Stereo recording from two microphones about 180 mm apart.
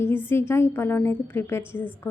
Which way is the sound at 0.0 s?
10° left (ahead or behind).